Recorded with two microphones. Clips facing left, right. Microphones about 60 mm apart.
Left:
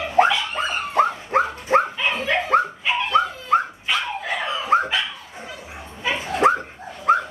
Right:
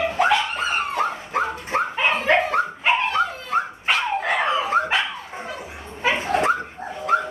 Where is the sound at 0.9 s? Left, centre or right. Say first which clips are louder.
Left 4 dB; left.